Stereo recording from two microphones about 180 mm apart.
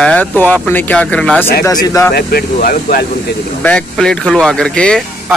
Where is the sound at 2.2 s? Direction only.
60° left (ahead or behind).